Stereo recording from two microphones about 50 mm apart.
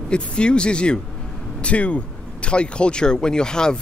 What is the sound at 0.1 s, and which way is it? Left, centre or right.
Speech, centre.